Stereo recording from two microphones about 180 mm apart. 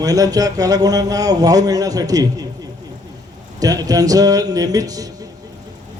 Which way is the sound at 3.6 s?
20° right (ahead or behind).